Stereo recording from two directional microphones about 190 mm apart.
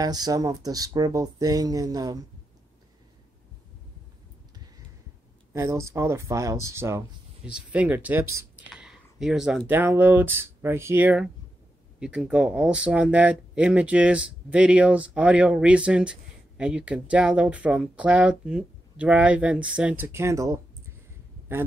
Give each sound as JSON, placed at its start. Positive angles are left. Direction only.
{"t": 0.0, "sound": "speech", "side_deg": -20}
{"t": 5.5, "sound": "speech", "side_deg": -15}